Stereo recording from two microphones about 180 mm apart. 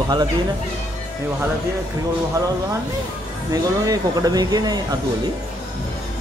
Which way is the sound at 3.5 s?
20° right (ahead or behind).